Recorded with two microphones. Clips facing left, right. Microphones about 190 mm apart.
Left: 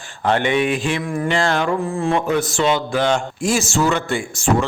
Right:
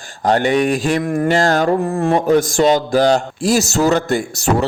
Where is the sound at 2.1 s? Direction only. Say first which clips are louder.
Right 6 dB; 40° right (ahead or behind).